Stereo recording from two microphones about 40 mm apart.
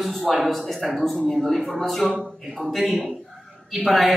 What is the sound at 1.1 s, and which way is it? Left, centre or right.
Speech, left.